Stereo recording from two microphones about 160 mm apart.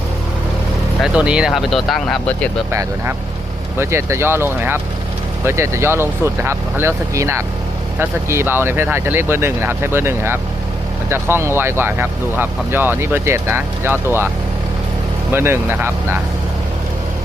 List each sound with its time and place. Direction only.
1.0 s speech: 5° right (ahead or behind)
3.8 s speech: 15° right (ahead or behind)
15.3 s speech: 15° right (ahead or behind)